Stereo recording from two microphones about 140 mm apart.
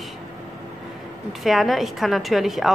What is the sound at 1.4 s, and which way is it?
A woman's voice, centre (ahead or behind).